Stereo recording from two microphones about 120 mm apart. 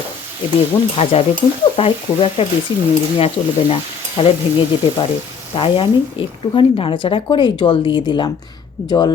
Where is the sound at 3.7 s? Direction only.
50° left (ahead or behind).